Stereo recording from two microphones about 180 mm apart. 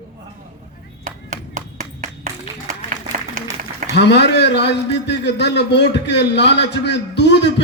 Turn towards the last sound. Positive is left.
turn(degrees=70)  # may be behind; listen again after turning